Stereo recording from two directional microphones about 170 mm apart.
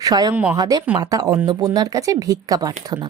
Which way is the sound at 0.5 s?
20° right (ahead or behind).